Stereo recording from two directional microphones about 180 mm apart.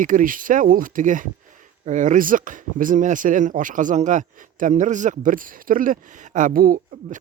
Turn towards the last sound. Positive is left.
turn(degrees=-50)  # may be behind; listen again after turning